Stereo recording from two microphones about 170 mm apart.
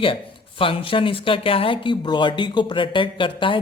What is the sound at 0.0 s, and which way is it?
Speech, 30° left (ahead or behind).